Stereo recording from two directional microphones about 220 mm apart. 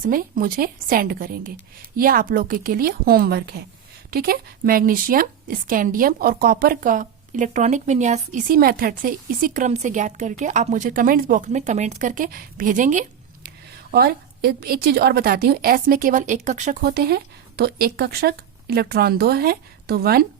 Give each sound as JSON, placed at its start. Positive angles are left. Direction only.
{"t": 0.0, "sound": "a woman's voice", "side_deg": -40}
{"t": 16.8, "sound": "speech", "side_deg": -45}